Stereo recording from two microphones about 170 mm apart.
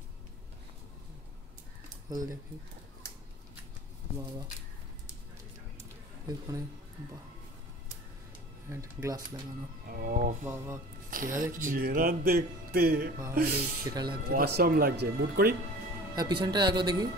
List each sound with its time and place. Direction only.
2.1 s speech: 20° right (ahead or behind)
4.2 s speech: 25° right (ahead or behind)
5.8 s a sound: 20° right (ahead or behind)
8.6 s speech: 20° right (ahead or behind)
9.8 s speech: 55° right (ahead or behind)
10.4 s speech: 15° right (ahead or behind)
11.1 s speech: 55° right (ahead or behind)
16.2 s speech: 25° right (ahead or behind)